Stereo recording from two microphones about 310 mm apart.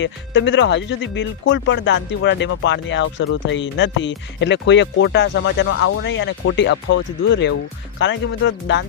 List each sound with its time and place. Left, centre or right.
0.0 s speech: left